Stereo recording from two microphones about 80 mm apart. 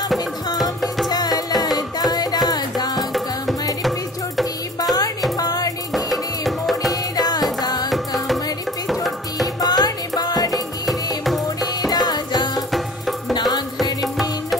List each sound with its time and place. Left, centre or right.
1.0 s music: left
5.4 s music: left
5.9 s music: centre
6.9 s music: left
8.8 s music: centre
9.6 s music: left
11.9 s music: left